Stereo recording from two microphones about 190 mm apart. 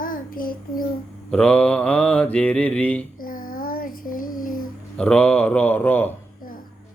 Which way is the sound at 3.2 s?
50° left (ahead or behind).